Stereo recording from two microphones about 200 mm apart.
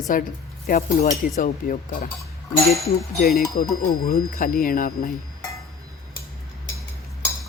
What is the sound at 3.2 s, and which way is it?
A man's voice, 50° left (ahead or behind).